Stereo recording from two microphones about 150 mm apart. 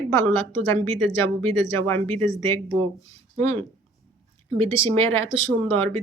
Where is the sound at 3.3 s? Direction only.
45° right (ahead or behind).